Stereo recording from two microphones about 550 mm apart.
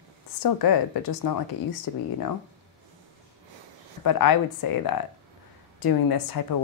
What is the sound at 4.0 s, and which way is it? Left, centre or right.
Speech, left.